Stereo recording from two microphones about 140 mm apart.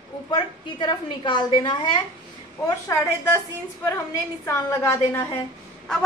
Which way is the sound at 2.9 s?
20° left (ahead or behind).